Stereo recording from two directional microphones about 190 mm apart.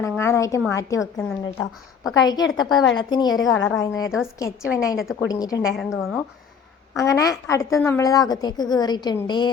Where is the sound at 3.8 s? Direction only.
15° left (ahead or behind).